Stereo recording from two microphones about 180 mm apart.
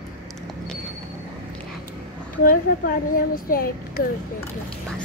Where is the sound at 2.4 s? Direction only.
55° left (ahead or behind).